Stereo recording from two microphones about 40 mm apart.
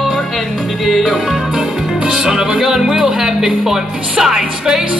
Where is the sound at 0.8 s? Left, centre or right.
Centre.